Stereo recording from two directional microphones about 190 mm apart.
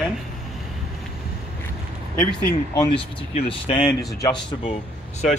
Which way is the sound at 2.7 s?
25° left (ahead or behind).